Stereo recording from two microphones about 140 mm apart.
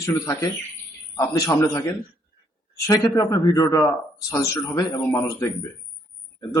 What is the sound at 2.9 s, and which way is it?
A man's voice, 25° left (ahead or behind).